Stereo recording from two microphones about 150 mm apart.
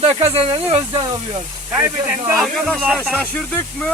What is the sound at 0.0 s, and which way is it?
Speech, 40° right (ahead or behind).